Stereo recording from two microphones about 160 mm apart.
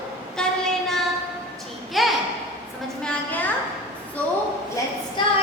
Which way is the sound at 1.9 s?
Centre (ahead or behind).